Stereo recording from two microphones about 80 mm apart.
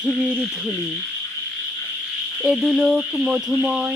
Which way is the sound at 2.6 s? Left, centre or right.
Centre.